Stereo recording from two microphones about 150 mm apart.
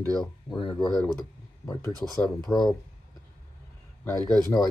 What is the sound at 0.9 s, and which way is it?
Speech, 5° left (ahead or behind).